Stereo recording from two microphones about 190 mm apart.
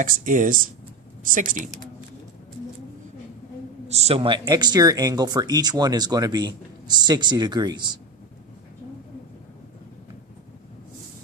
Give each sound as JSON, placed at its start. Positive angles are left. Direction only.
{"t": 0.0, "sound": "speech", "side_deg": -45}
{"t": 3.8, "sound": "speech", "side_deg": -35}